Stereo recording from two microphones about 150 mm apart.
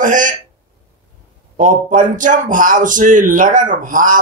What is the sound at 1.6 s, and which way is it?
Speech, 60° right (ahead or behind).